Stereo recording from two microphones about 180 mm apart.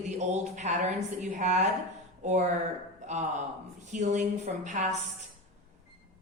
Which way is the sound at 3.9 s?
40° right (ahead or behind).